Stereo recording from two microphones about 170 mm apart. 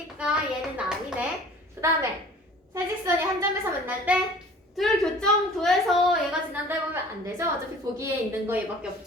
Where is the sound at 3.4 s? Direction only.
10° right (ahead or behind).